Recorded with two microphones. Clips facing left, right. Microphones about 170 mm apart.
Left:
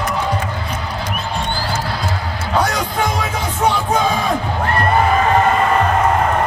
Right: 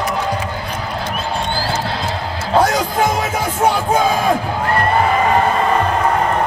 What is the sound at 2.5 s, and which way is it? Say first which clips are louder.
Music: right 4 dB; 25° right (ahead or behind).